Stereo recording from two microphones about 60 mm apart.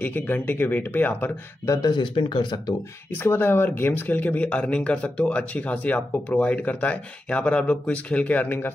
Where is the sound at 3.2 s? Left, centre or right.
Left.